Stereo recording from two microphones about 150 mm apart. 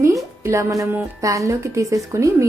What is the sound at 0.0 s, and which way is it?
A woman's voice, 20° right (ahead or behind).